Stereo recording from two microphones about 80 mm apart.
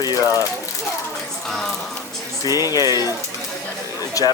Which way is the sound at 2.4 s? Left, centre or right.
Left.